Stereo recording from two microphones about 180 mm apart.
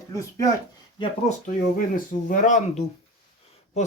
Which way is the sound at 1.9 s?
45° left (ahead or behind).